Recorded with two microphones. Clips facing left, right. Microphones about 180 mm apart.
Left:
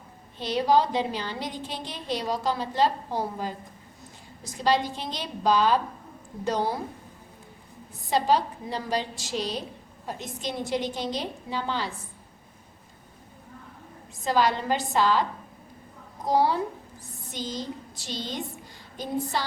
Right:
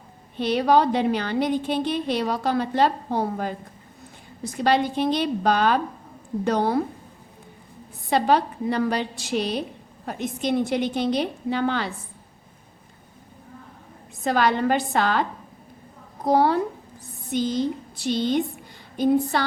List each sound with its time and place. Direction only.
0.3 s a woman's voice: 60° right (ahead or behind)
8.1 s a woman's voice: 60° right (ahead or behind)
14.3 s a woman's voice: 60° right (ahead or behind)